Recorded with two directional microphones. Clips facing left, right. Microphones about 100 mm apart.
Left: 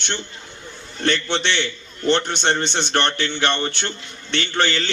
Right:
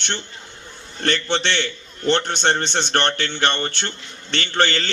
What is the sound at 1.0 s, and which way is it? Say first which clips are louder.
A man's voice: even; 45° right (ahead or behind).